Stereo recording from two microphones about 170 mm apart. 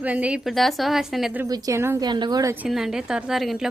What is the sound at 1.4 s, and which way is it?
A woman's voice, 20° right (ahead or behind).